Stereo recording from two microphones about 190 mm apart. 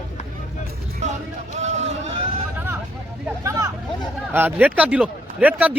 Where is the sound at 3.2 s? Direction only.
15° right (ahead or behind).